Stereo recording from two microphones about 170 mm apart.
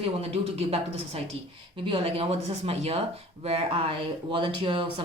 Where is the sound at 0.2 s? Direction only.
35° right (ahead or behind).